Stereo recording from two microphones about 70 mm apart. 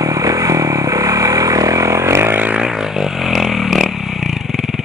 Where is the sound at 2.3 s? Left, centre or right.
Right.